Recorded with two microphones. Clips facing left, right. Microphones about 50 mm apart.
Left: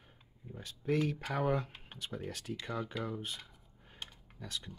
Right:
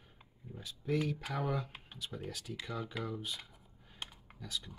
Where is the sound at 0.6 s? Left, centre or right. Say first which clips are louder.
Left 2 dB; left.